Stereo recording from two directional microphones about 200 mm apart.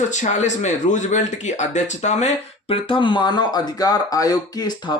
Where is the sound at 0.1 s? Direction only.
35° left (ahead or behind).